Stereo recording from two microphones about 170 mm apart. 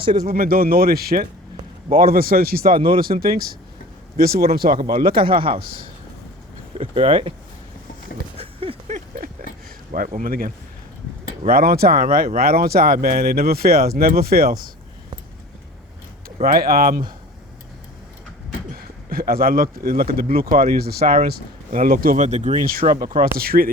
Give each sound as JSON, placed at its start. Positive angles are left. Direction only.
{"t": 0.0, "sound": "speech", "side_deg": -30}
{"t": 0.3, "sound": "speech", "side_deg": -60}
{"t": 2.7, "sound": "speech", "side_deg": -30}
{"t": 3.0, "sound": "speech", "side_deg": -60}
{"t": 4.8, "sound": "speech", "side_deg": -30}
{"t": 6.7, "sound": "speech", "side_deg": -35}
{"t": 8.7, "sound": "a sound", "side_deg": -30}
{"t": 9.9, "sound": "speech", "side_deg": -50}
{"t": 16.4, "sound": "speech", "side_deg": -60}
{"t": 18.7, "sound": "a sound", "side_deg": -60}
{"t": 19.8, "sound": "speech", "side_deg": -60}
{"t": 22.9, "sound": "speech", "side_deg": -25}
{"t": 23.2, "sound": "speech", "side_deg": -60}